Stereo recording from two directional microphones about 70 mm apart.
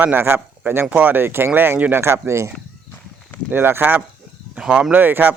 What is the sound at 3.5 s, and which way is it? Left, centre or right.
Speech, right.